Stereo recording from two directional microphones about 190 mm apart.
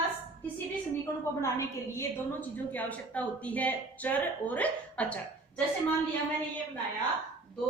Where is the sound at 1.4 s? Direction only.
15° left (ahead or behind).